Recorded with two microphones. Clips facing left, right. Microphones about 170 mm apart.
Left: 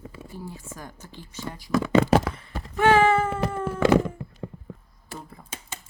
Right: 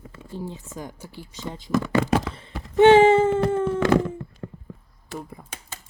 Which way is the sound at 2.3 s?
25° right (ahead or behind).